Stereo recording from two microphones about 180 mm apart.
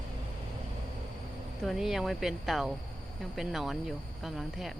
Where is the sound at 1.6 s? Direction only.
Centre (ahead or behind).